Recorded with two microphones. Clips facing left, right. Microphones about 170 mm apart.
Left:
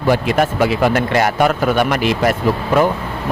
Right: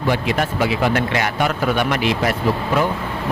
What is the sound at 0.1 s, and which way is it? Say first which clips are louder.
Speech: left 6 dB; 45° left (ahead or behind).